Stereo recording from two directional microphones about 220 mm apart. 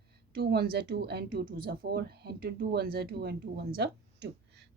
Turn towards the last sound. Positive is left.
turn(degrees=-50)  # may be behind; listen again after turning